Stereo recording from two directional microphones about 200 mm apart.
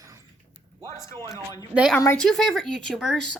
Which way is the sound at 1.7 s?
5° right (ahead or behind).